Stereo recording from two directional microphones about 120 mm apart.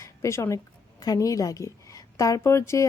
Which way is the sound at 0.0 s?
25° left (ahead or behind).